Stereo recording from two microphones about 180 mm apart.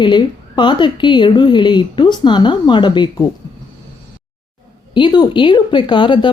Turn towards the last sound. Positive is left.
turn(degrees=25)  # may be behind; listen again after turning